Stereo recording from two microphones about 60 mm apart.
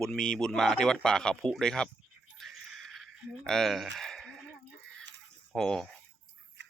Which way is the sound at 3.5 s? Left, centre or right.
Centre.